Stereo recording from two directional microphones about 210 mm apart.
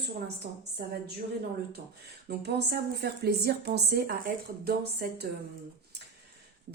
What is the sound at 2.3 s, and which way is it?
A woman's voice, 50° right (ahead or behind).